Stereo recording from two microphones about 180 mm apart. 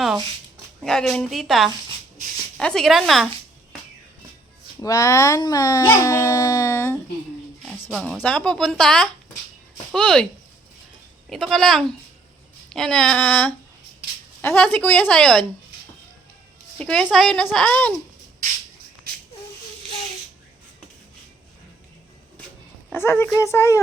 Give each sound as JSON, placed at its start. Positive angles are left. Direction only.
{"t": 0.8, "sound": "speech", "side_deg": 0}
{"t": 4.8, "sound": "speech", "side_deg": 20}
{"t": 7.6, "sound": "speech", "side_deg": 0}
{"t": 11.3, "sound": "a woman's voice", "side_deg": 0}
{"t": 16.7, "sound": "a woman's voice", "side_deg": 5}
{"t": 19.1, "sound": "a sound", "side_deg": -55}
{"t": 22.9, "sound": "a woman's voice", "side_deg": 10}